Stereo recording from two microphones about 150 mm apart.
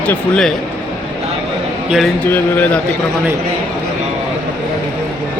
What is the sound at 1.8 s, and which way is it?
Speech, centre (ahead or behind).